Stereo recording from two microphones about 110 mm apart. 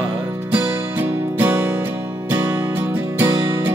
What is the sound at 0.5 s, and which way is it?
Music, 20° right (ahead or behind).